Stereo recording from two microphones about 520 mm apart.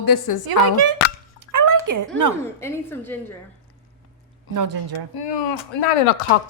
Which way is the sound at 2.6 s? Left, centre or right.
Centre.